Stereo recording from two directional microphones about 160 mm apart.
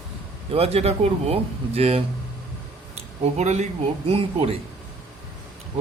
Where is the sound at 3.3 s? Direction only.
45° right (ahead or behind).